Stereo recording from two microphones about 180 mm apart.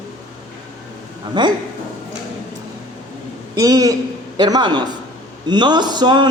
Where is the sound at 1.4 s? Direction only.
25° right (ahead or behind).